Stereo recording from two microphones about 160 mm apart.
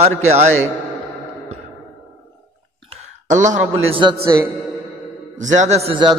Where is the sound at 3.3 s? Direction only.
50° right (ahead or behind).